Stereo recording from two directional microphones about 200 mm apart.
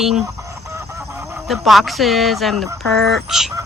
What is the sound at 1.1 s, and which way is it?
Fowl, 5° right (ahead or behind).